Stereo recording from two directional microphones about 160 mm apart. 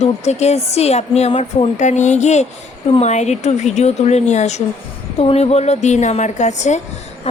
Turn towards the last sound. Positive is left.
turn(degrees=45)  # may be behind; listen again after turning